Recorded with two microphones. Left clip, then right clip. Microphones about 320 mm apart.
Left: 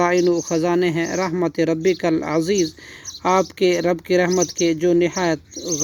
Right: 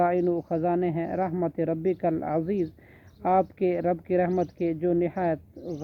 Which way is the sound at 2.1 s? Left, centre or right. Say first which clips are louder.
Left 7 dB; centre.